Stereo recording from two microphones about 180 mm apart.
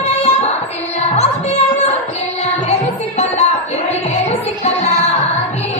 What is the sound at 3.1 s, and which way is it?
Music, 35° left (ahead or behind).